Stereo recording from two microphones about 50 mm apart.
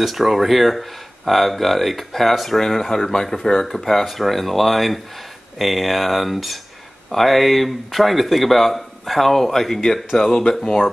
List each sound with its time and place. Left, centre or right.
0.0 s speech: centre